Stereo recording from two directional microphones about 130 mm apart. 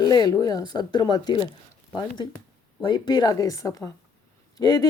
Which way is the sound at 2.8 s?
35° left (ahead or behind).